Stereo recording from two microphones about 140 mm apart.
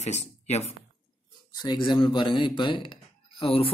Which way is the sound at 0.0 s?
55° left (ahead or behind).